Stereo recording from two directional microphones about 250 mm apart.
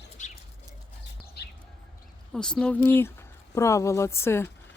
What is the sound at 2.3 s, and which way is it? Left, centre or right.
Speech, centre.